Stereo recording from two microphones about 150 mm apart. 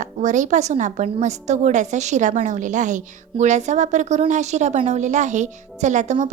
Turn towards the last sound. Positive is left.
turn(degrees=-55)  # may be behind; listen again after turning